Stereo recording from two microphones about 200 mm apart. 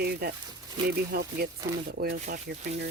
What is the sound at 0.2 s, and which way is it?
Speech, 50° right (ahead or behind).